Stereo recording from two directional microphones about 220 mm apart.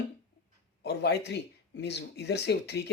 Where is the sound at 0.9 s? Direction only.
50° left (ahead or behind).